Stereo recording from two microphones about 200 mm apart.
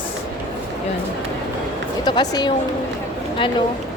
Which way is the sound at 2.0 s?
20° left (ahead or behind).